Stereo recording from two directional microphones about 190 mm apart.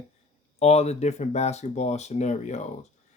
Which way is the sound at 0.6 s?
35° left (ahead or behind).